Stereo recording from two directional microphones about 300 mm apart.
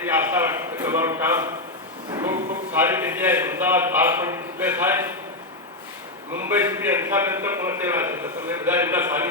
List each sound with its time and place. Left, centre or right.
0.0 s a man's voice: centre
6.3 s a man's voice: centre